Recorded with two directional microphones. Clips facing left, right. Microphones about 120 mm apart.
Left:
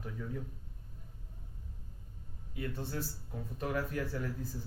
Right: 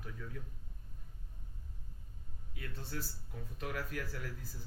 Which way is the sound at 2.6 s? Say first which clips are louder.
Left 6 dB; 20° left (ahead or behind).